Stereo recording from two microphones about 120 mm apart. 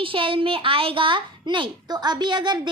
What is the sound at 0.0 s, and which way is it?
A child's voice, 45° right (ahead or behind).